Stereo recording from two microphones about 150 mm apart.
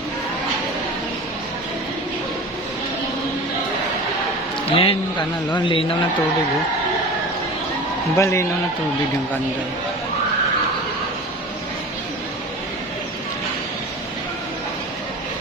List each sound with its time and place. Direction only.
4.7 s a man's voice: 40° left (ahead or behind)
8.1 s a man's voice: 20° left (ahead or behind)